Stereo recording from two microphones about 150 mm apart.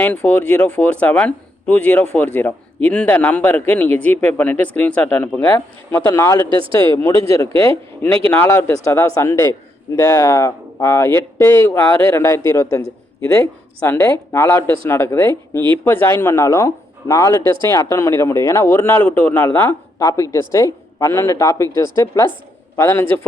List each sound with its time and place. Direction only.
0.0 s a man's voice: 10° left (ahead or behind)
6.5 s speech: 35° right (ahead or behind)
6.9 s a man's voice: 20° left (ahead or behind)